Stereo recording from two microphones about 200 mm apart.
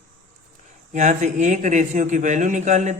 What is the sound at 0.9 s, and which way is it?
Speech, 35° right (ahead or behind).